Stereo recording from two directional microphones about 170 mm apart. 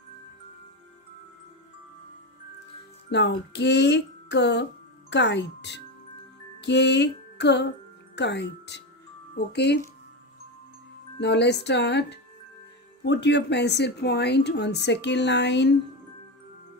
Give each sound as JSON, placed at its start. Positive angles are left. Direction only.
{"t": 3.1, "sound": "speech", "side_deg": 90}
{"t": 6.6, "sound": "music", "side_deg": 90}
{"t": 8.2, "sound": "speech", "side_deg": 90}
{"t": 9.3, "sound": "speech", "side_deg": 75}
{"t": 11.1, "sound": "speech", "side_deg": 85}